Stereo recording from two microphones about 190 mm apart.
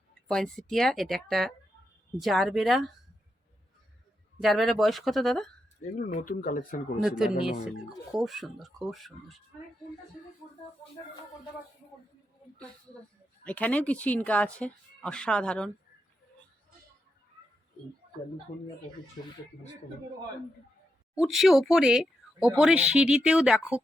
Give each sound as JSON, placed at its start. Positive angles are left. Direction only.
{"t": 0.3, "sound": "speech", "side_deg": 5}
{"t": 4.4, "sound": "speech", "side_deg": 0}
{"t": 6.0, "sound": "speech", "side_deg": 40}
{"t": 7.8, "sound": "speech", "side_deg": 0}
{"t": 13.4, "sound": "speech", "side_deg": 10}
{"t": 21.2, "sound": "speech", "side_deg": 0}